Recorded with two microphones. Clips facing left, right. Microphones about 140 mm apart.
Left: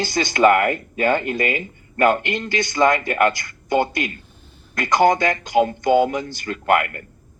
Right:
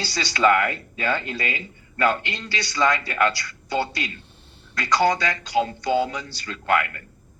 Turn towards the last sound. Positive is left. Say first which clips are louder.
# left 4 dB
turn(degrees=45)  # may be behind; listen again after turning